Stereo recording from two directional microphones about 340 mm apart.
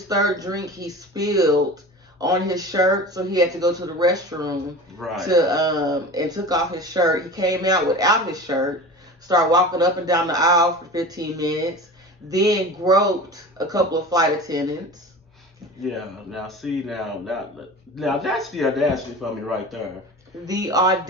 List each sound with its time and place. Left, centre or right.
0.1 s speech: centre
4.9 s a man's voice: centre
5.3 s speech: centre
15.8 s a man's voice: centre
20.4 s speech: centre